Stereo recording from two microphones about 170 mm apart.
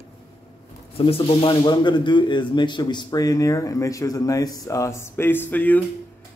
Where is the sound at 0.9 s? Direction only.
35° left (ahead or behind); by 5.8 s 10° left (ahead or behind).